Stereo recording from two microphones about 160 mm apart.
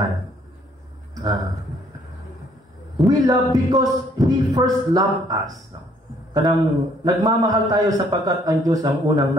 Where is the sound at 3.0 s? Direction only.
25° right (ahead or behind).